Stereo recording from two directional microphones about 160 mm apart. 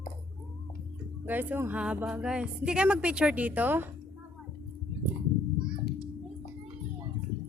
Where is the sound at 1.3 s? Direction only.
10° right (ahead or behind).